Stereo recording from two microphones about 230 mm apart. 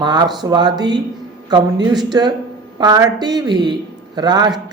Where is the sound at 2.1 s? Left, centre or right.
Centre.